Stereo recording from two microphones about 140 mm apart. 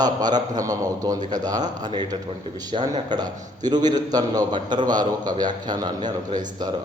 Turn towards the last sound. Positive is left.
turn(degrees=-30)  # may be behind; listen again after turning